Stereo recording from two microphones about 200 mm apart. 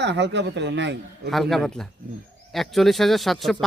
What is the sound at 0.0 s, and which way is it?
Speech, 60° right (ahead or behind).